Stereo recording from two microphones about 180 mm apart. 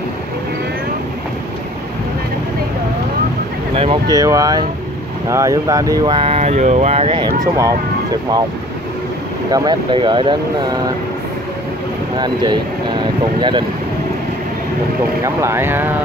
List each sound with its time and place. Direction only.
3.7 s speech: 30° right (ahead or behind)
9.5 s speech: 25° right (ahead or behind)
13.4 s speech: 25° right (ahead or behind)
15.2 s speech: 15° right (ahead or behind)